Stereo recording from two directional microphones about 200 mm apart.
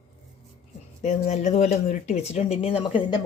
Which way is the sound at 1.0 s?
35° left (ahead or behind).